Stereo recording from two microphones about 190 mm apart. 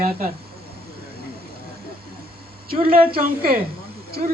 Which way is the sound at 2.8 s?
50° right (ahead or behind).